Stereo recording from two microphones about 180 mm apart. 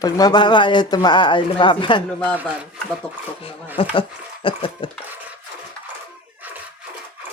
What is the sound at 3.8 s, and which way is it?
Speech, 25° left (ahead or behind).